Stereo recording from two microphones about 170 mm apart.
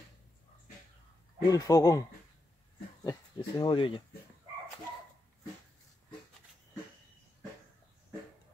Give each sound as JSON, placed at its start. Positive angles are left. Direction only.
{"t": 1.5, "sound": "speech", "side_deg": 20}
{"t": 3.0, "sound": "speech", "side_deg": 20}